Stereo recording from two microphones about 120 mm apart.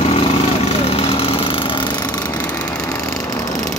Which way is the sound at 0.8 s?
55° left (ahead or behind).